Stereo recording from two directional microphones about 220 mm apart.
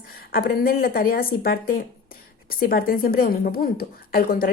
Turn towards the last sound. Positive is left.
turn(degrees=40)  # may be behind; listen again after turning